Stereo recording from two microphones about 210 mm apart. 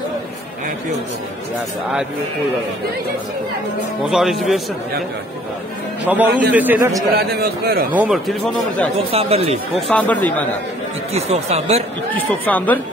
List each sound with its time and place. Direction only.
4.0 s a man's voice: centre (ahead or behind)
6.0 s a man's voice: 10° right (ahead or behind)
7.2 s a man's voice: 50° right (ahead or behind)
7.9 s a man's voice: 5° right (ahead or behind)
9.1 s speech: 30° right (ahead or behind)
9.8 s speech: 5° left (ahead or behind)
11.1 s speech: 30° right (ahead or behind)
12.1 s speech: 10° left (ahead or behind)